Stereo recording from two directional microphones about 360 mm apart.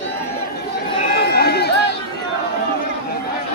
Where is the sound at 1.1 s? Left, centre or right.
Left.